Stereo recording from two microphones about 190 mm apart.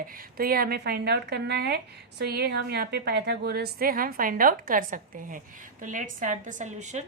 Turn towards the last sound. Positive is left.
turn(degrees=-40)  # may be behind; listen again after turning